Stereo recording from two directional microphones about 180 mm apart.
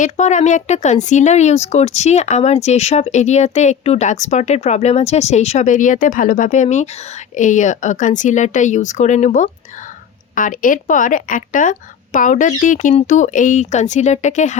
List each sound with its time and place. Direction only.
0.0 s speech: 40° left (ahead or behind)